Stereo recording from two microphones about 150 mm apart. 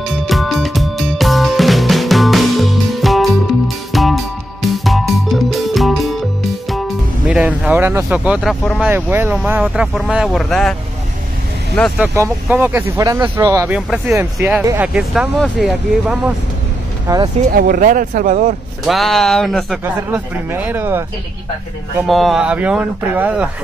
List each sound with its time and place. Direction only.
0.0 s music: centre (ahead or behind)
7.2 s speech: 10° right (ahead or behind)
12.0 s speech: 15° right (ahead or behind)
13.7 s speech: 5° right (ahead or behind)
14.6 s speech: 20° right (ahead or behind)
14.9 s speech: 5° right (ahead or behind)
17.1 s speech: 20° right (ahead or behind)
17.5 s speech: 70° right (ahead or behind)
18.9 s speech: centre (ahead or behind)
19.8 s speech: 15° right (ahead or behind)
22.0 s speech: centre (ahead or behind)